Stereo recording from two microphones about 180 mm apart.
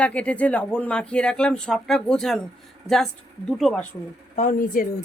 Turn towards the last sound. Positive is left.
turn(degrees=45)  # may be behind; listen again after turning